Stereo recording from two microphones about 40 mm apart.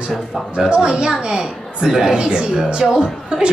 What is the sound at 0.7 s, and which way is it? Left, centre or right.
Speech, right.